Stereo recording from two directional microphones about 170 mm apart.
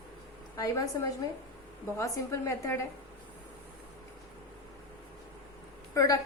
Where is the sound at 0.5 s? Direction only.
20° left (ahead or behind).